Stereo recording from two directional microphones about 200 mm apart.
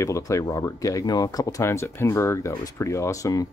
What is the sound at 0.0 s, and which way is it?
Speech, 15° left (ahead or behind).